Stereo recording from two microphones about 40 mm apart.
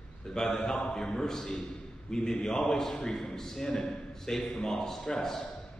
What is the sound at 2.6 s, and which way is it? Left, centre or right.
A man's voice, centre.